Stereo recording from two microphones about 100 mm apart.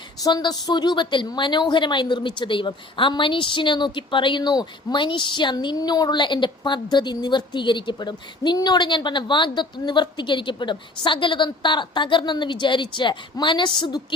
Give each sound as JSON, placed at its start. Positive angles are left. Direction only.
{"t": 0.2, "sound": "a woman's voice", "side_deg": 40}